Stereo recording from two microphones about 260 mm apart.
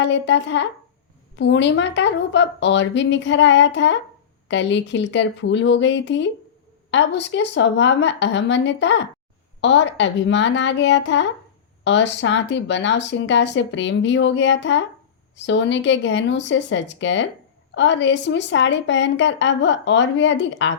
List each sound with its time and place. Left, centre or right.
0.0 s speech: left